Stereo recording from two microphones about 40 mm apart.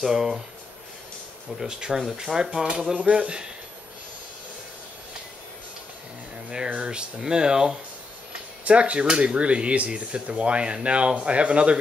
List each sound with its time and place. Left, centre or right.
0.0 s speech: centre
1.5 s speech: centre
2.7 s speech: right
6.3 s a sound: centre
6.8 s speech: right
8.6 s speech: right